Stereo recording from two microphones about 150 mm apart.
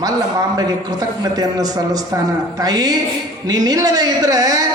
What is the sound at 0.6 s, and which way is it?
A man's voice, 25° right (ahead or behind).